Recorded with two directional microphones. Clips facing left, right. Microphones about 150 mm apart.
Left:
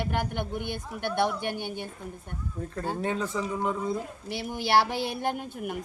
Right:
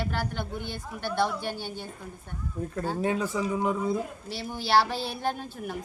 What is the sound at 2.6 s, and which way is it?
Speech, 10° right (ahead or behind).